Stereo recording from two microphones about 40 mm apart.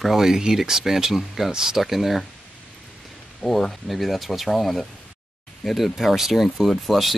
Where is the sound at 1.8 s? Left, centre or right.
Centre.